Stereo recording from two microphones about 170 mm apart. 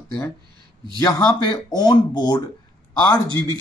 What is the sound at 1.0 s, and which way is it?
Speech, 25° left (ahead or behind).